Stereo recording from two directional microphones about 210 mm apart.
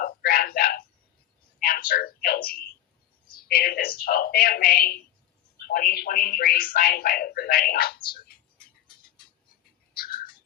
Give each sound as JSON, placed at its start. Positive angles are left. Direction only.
{"t": 0.0, "sound": "a sound", "side_deg": 45}
{"t": 1.6, "sound": "speech", "side_deg": 45}
{"t": 9.9, "sound": "cat", "side_deg": 45}